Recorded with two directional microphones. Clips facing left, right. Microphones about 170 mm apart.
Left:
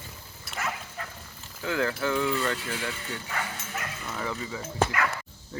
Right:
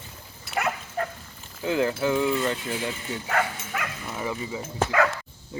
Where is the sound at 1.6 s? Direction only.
20° right (ahead or behind).